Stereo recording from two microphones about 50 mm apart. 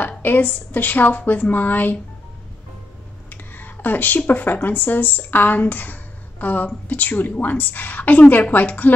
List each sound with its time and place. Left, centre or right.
0.2 s a woman's voice: left
3.3 s a sound: left
4.3 s a woman's voice: left